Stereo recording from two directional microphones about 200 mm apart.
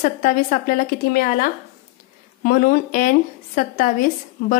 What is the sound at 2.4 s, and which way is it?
A woman's voice, 45° left (ahead or behind).